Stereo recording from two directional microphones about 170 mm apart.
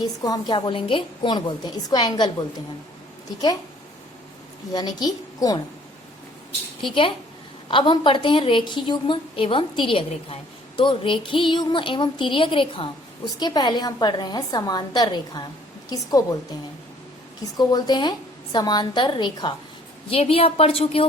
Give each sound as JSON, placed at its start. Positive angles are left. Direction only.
{"t": 0.0, "sound": "speech", "side_deg": 25}
{"t": 4.7, "sound": "speech", "side_deg": 25}
{"t": 7.7, "sound": "speech", "side_deg": 30}
{"t": 17.6, "sound": "a woman's voice", "side_deg": 25}